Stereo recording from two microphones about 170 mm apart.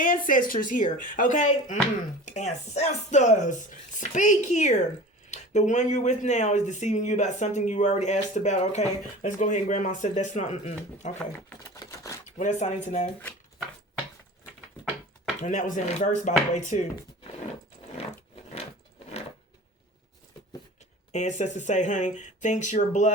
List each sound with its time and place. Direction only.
0.0 s speech: 50° left (ahead or behind)
11.9 s a sound: 20° left (ahead or behind)
12.2 s speech: 45° left (ahead or behind)
15.4 s speech: 45° left (ahead or behind)
21.1 s speech: 45° left (ahead or behind)